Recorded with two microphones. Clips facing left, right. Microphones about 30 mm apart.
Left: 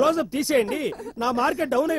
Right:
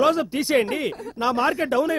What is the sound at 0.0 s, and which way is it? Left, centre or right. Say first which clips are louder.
A man's voice: right 1 dB; right.